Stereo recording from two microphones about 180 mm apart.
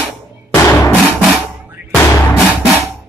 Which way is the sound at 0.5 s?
20° left (ahead or behind).